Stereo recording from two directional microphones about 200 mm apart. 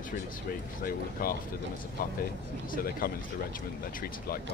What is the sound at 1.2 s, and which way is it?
Speech, 45° left (ahead or behind).